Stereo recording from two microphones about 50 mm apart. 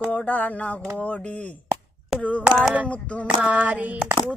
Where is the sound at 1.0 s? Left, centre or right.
Left.